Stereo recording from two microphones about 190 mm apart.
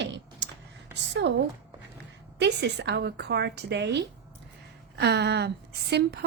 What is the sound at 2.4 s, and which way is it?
A woman's voice, 65° right (ahead or behind).